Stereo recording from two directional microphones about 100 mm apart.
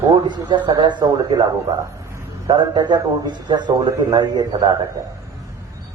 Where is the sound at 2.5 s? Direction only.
55° right (ahead or behind).